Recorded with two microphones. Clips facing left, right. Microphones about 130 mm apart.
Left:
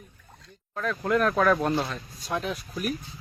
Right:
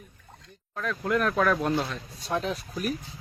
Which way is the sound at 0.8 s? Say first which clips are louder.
Left 2 dB; centre (ahead or behind).